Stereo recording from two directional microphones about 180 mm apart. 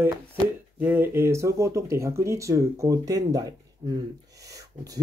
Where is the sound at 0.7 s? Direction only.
10° right (ahead or behind).